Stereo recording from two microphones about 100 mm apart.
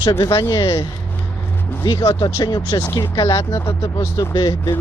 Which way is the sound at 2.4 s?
45° left (ahead or behind).